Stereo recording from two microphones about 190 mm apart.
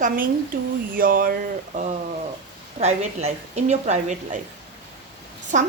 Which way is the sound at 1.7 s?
40° right (ahead or behind).